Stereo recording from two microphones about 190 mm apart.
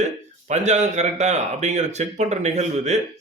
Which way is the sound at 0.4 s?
40° right (ahead or behind).